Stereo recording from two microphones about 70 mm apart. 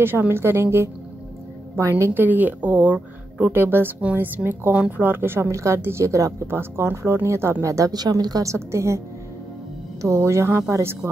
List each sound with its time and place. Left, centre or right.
0.0 s a woman's voice: right
2.1 s speech: right
3.5 s a woman's voice: right
6.5 s speech: right
7.6 s a woman's voice: right
8.5 s a woman's voice: right
10.0 s speech: right